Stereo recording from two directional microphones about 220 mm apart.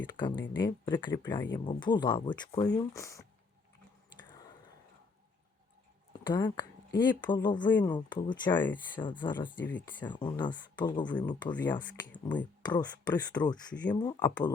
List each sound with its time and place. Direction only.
0.0 s speech: 20° left (ahead or behind)
6.2 s speech: 20° left (ahead or behind)